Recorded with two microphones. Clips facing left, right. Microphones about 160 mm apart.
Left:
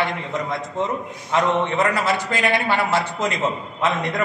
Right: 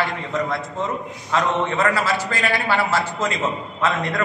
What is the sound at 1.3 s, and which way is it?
A man's voice, 20° left (ahead or behind).